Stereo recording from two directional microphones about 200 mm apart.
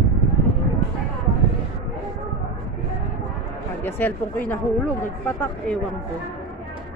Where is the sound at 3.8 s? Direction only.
10° left (ahead or behind).